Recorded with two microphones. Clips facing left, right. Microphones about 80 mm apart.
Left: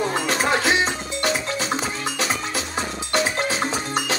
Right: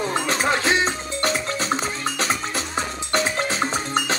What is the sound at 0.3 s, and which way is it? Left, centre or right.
Music, right.